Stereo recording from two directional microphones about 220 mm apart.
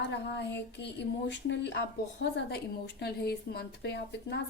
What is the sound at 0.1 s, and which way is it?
A woman's voice, 50° left (ahead or behind).